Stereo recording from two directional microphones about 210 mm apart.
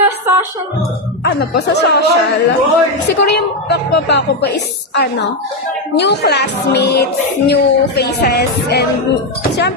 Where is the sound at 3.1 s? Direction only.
50° left (ahead or behind).